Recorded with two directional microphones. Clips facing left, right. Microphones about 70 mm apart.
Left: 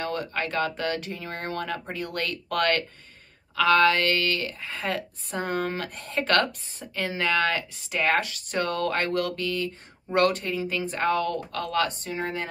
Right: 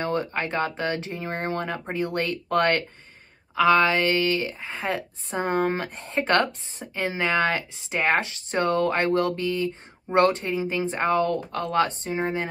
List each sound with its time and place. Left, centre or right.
0.0 s speech: right